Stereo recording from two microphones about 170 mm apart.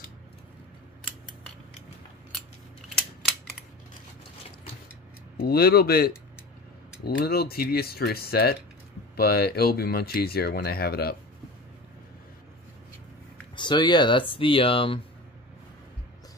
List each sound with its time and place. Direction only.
5.4 s speech: 65° left (ahead or behind)
7.2 s speech: 65° left (ahead or behind)
13.6 s speech: 25° left (ahead or behind)